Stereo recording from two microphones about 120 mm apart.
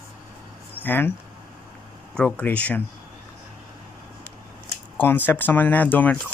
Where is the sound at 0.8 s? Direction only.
15° left (ahead or behind).